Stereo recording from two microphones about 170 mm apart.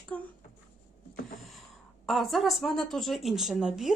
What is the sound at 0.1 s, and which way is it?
Speech, 10° left (ahead or behind).